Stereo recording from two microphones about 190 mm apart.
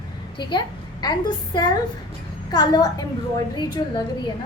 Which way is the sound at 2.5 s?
20° left (ahead or behind).